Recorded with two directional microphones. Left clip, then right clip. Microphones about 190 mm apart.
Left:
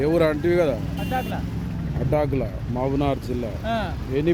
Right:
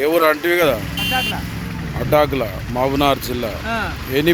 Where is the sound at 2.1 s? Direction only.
5° left (ahead or behind).